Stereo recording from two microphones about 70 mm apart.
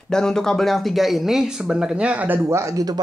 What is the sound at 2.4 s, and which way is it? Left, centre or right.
Speech, right.